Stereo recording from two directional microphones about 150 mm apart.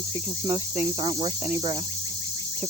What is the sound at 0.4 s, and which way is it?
Speech, 50° left (ahead or behind).